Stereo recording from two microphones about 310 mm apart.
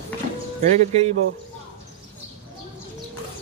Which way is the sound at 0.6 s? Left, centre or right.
Right.